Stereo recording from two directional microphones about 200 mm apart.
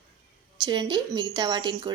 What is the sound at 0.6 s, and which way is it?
A woman's voice, 20° right (ahead or behind).